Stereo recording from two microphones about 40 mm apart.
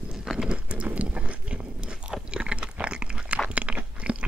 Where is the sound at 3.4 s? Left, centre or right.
Right.